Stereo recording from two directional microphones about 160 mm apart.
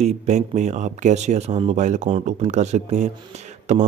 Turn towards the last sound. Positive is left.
turn(degrees=-45)  # may be behind; listen again after turning